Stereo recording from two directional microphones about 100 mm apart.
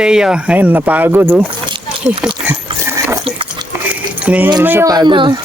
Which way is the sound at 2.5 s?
25° right (ahead or behind).